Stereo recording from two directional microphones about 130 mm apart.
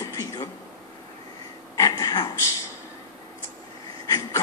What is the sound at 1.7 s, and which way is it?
Speech, 30° left (ahead or behind).